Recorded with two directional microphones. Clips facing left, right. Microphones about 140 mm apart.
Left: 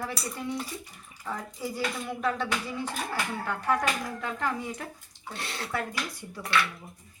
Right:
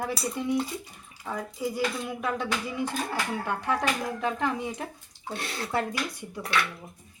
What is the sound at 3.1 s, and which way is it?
Speech, 20° right (ahead or behind).